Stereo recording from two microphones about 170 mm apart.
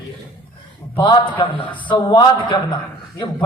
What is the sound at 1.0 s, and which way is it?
Speech, 30° left (ahead or behind).